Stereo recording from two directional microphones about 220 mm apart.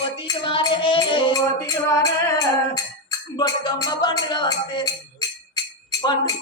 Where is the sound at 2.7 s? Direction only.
15° left (ahead or behind).